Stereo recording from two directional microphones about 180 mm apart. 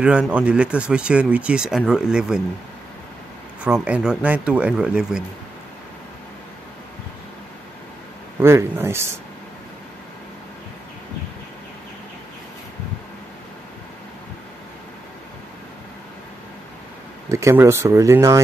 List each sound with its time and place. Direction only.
0.3 s speech: 5° right (ahead or behind)
3.6 s speech: 5° right (ahead or behind)
8.4 s speech: 15° right (ahead or behind)
17.3 s speech: 15° right (ahead or behind)